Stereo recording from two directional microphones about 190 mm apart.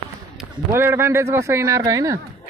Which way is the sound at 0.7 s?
15° right (ahead or behind).